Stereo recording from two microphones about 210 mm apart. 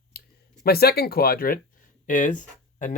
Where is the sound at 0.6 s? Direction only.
45° left (ahead or behind).